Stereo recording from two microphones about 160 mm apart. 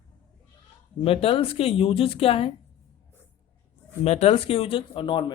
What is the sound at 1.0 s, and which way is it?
Speech, 35° left (ahead or behind).